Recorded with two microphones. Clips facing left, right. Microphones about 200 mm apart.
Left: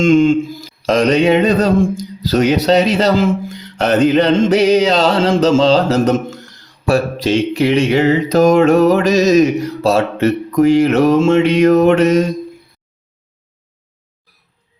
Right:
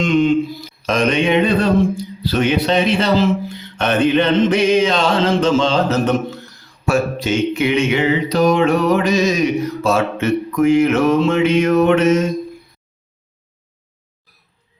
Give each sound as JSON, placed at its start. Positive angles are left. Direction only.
{"t": 0.0, "sound": "mantra", "side_deg": 45}